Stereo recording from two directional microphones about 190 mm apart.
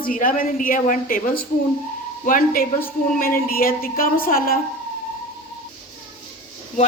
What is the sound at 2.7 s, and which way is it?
Speech, 10° left (ahead or behind).